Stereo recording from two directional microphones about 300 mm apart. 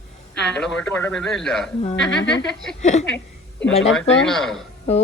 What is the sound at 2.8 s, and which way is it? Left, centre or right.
Speech, left.